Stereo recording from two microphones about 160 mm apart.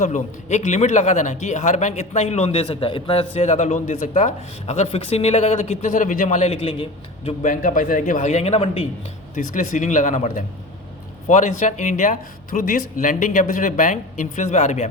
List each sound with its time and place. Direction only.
0.0 s speech: 45° left (ahead or behind)
7.3 s speech: 55° left (ahead or behind); by 8.9 s 35° left (ahead or behind)
9.3 s speech: 50° left (ahead or behind)